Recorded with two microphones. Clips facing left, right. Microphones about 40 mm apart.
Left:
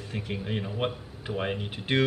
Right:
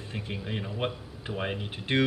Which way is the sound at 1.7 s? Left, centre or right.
Centre.